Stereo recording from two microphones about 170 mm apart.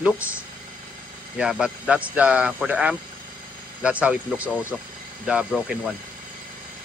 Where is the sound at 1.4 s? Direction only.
5° right (ahead or behind).